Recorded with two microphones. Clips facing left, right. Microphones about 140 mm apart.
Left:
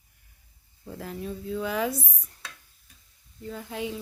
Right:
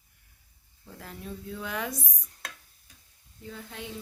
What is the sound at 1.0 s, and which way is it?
Speech, 5° left (ahead or behind).